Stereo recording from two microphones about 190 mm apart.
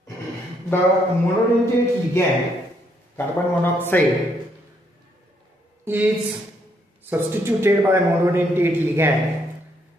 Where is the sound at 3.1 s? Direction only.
10° left (ahead or behind).